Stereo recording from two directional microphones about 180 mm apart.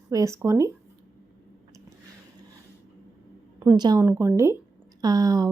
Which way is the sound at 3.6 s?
20° right (ahead or behind).